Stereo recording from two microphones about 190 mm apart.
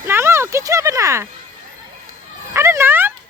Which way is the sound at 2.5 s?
15° right (ahead or behind).